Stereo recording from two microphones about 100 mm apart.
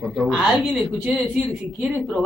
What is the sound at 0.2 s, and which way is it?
Speech, 5° right (ahead or behind).